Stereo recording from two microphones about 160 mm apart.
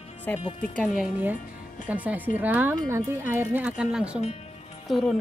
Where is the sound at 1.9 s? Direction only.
10° right (ahead or behind).